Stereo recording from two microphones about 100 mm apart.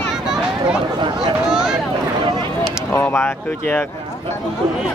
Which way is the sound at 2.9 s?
20° left (ahead or behind).